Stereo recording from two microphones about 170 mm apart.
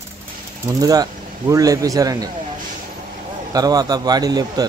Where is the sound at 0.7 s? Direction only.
20° right (ahead or behind).